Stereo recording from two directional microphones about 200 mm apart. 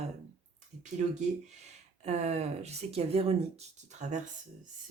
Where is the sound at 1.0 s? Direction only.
35° right (ahead or behind).